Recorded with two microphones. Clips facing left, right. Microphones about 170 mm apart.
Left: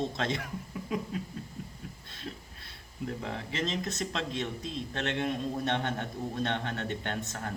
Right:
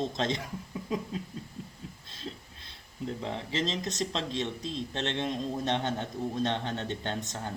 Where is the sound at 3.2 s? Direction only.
30° right (ahead or behind).